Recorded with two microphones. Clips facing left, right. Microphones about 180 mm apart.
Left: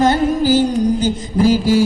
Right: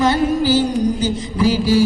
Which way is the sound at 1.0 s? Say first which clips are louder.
Left 3 dB; 50° left (ahead or behind).